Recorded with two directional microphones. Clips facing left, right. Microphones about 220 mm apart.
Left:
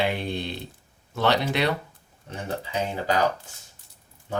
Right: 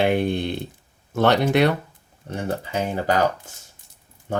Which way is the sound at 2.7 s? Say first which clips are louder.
Right 3 dB; 50° right (ahead or behind).